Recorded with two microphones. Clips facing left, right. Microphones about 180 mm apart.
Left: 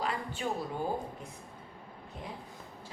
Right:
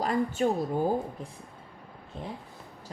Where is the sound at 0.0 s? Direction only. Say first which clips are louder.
Right 8 dB; 45° right (ahead or behind).